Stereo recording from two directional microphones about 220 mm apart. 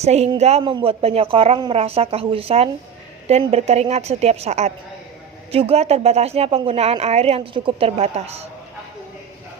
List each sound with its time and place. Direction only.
0.0 s speech: 30° right (ahead or behind)